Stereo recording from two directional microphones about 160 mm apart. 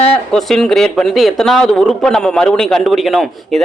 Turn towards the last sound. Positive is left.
turn(degrees=0)  # may be behind; listen again after turning